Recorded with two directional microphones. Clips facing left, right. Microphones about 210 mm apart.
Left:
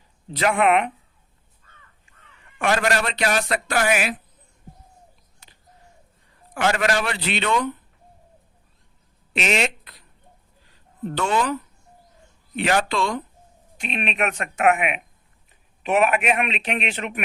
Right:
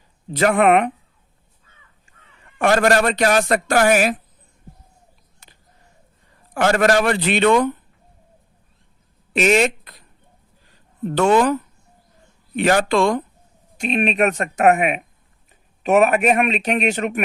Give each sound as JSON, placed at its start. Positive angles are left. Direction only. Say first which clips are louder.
{"t": 0.3, "sound": "speech", "louder": "right 4 dB", "side_deg": -45}
{"t": 2.6, "sound": "speech", "louder": "right 6 dB", "side_deg": -45}
{"t": 5.4, "sound": "a sound", "louder": "right 2 dB", "side_deg": -45}
{"t": 6.5, "sound": "speech", "louder": "right 6 dB", "side_deg": -45}
{"t": 9.3, "sound": "speech", "louder": "right 7 dB", "side_deg": -45}
{"t": 11.1, "sound": "speech", "louder": "right 8 dB", "side_deg": -50}
{"t": 12.5, "sound": "speech", "louder": "right 5 dB", "side_deg": -45}